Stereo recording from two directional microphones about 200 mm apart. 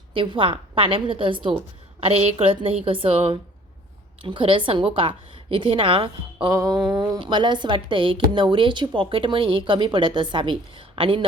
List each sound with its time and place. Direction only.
0.1 s a woman's voice: 25° right (ahead or behind)
6.5 s a sound: 15° right (ahead or behind)
6.7 s speech: 5° right (ahead or behind)
7.0 s a woman's voice: 20° right (ahead or behind)